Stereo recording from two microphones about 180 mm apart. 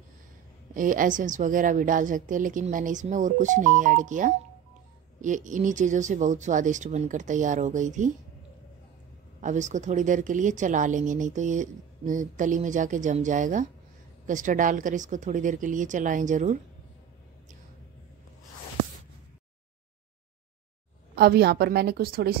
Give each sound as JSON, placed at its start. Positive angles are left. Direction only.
{"t": 0.7, "sound": "a woman's voice", "side_deg": -45}
{"t": 9.4, "sound": "a woman's voice", "side_deg": -45}
{"t": 21.1, "sound": "a woman's voice", "side_deg": -60}